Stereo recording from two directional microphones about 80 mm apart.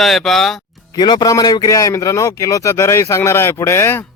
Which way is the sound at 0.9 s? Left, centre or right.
Left.